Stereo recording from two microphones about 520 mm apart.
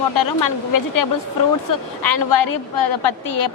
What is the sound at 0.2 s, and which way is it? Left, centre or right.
A woman's voice, left.